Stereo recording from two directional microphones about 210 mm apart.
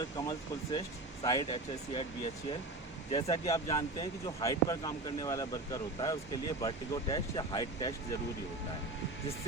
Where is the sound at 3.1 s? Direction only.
20° left (ahead or behind).